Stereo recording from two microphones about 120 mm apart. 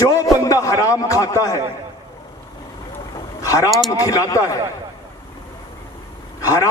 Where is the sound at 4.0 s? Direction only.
30° left (ahead or behind).